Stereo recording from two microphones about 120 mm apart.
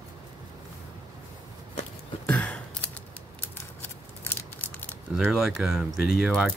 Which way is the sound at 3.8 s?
15° left (ahead or behind).